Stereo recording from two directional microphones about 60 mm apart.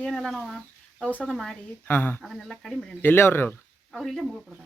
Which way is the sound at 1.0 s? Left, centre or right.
Left.